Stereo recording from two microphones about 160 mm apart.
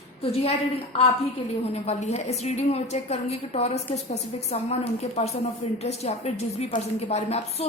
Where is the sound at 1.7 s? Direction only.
40° left (ahead or behind).